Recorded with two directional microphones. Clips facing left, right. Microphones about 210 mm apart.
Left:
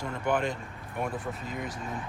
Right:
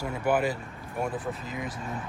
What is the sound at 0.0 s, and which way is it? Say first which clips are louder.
Speech: right 3 dB; 5° right (ahead or behind).